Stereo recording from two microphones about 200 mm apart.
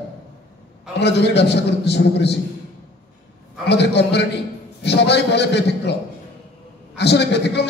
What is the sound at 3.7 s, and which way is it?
A man's voice, 60° left (ahead or behind).